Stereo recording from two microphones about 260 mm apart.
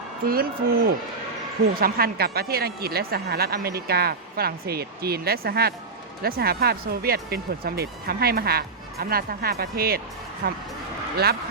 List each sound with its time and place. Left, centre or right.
0.3 s speech: right